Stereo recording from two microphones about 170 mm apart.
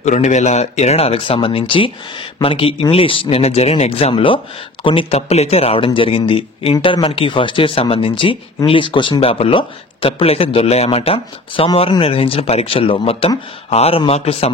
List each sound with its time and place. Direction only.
0.0 s speech: 45° left (ahead or behind)